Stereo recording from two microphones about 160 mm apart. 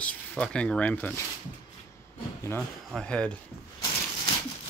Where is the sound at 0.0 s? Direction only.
5° left (ahead or behind).